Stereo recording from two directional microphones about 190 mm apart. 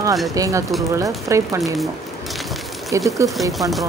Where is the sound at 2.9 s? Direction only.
15° right (ahead or behind).